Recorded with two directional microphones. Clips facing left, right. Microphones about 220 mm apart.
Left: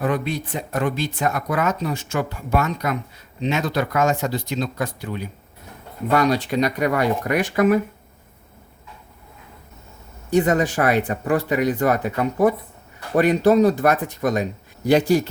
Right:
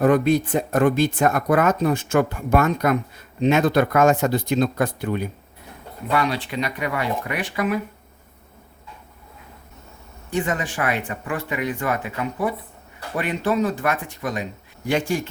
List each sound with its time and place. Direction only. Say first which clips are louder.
0.0 s speech: right 6 dB; 45° right (ahead or behind)
6.1 s speech: left 4 dB; 40° left (ahead or behind)
10.2 s speech: left 7 dB; 40° left (ahead or behind)